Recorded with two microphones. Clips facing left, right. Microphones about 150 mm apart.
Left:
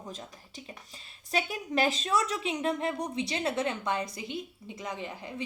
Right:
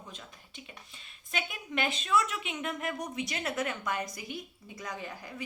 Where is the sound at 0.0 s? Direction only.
40° left (ahead or behind).